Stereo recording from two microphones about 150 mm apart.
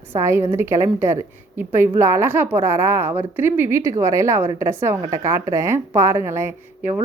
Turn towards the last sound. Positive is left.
turn(degrees=-15)  # may be behind; listen again after turning